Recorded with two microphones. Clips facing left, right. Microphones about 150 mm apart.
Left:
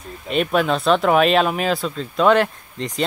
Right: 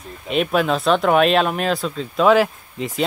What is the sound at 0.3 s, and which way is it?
Speech, centre (ahead or behind).